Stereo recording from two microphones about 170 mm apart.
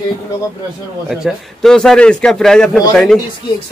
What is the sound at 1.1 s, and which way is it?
A man's voice, centre (ahead or behind).